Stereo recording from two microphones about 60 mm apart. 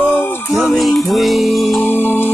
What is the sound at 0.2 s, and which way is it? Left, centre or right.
Music, left.